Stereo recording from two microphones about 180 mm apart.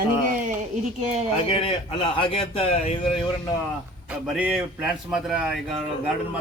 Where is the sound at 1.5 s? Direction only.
30° left (ahead or behind).